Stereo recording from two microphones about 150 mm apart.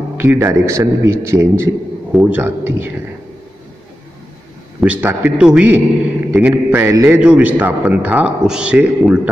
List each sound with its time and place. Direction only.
0.2 s a man's voice: 15° right (ahead or behind)
4.7 s a man's voice: 10° right (ahead or behind)